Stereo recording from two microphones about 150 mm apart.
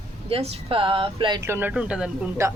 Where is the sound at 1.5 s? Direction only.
15° right (ahead or behind).